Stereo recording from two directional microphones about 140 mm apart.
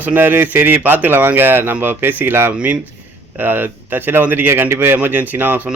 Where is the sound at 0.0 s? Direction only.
15° right (ahead or behind).